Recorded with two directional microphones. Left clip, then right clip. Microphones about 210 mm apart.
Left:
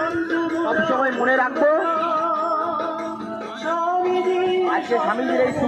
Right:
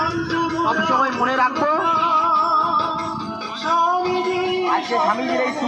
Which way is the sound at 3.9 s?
25° right (ahead or behind).